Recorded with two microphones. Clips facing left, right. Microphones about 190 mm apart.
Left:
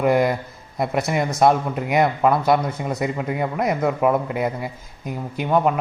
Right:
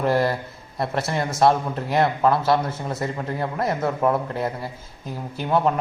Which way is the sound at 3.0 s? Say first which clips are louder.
Left 3 dB; 10° left (ahead or behind).